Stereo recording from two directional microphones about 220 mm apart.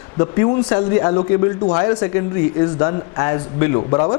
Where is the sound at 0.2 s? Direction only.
25° left (ahead or behind).